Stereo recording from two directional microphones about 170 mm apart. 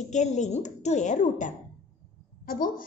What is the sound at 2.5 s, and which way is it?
Speech, 55° left (ahead or behind).